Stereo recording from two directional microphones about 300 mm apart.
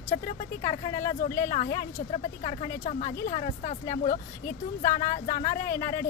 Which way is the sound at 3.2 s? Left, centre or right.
Left.